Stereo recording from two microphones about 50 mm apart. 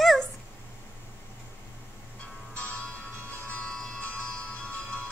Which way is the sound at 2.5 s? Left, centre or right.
Left.